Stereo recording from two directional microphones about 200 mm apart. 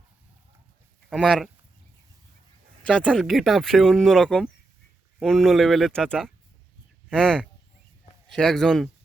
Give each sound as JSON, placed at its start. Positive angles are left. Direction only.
{"t": 1.1, "sound": "speech", "side_deg": 0}
{"t": 2.8, "sound": "speech", "side_deg": 5}